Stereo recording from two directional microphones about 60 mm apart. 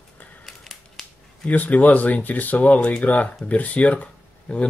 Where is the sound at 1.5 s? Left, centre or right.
Left.